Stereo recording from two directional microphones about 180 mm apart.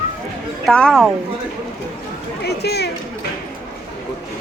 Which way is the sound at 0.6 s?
5° left (ahead or behind).